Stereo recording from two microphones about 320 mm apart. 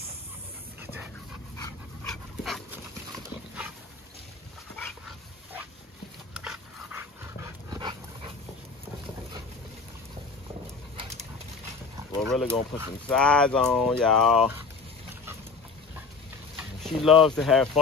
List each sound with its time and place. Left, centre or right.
0.7 s dog: centre
4.7 s dog: centre
6.3 s dog: centre
11.0 s a sound: centre
12.2 s speech: centre
13.1 s speech: centre
16.5 s speech: centre